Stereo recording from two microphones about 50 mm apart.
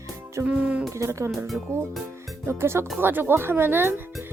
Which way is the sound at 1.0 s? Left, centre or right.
Right.